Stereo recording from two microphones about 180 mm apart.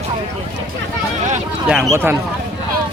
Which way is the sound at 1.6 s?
5° right (ahead or behind).